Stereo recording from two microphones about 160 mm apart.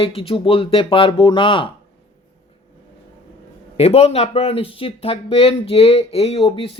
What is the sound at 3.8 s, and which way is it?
Speech, 40° left (ahead or behind).